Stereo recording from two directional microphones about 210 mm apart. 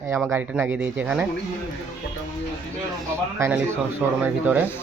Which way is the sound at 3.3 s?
15° right (ahead or behind).